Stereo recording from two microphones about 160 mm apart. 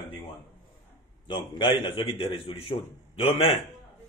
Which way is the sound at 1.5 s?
30° left (ahead or behind).